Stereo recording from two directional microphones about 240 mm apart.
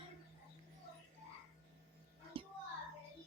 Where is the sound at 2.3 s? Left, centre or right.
Right.